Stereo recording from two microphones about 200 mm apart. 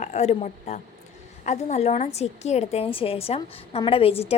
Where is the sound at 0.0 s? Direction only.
35° left (ahead or behind).